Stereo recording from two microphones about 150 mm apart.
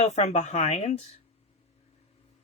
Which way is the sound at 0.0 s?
50° left (ahead or behind).